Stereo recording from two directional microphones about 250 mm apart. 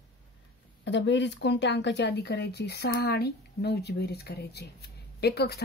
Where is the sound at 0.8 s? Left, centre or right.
Left.